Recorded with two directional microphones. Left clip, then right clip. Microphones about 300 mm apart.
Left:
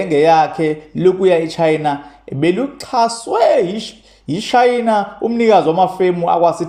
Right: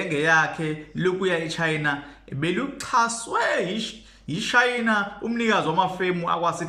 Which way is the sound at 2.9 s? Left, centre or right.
Centre.